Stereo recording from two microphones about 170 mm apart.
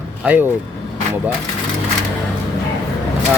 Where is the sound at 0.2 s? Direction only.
10° right (ahead or behind).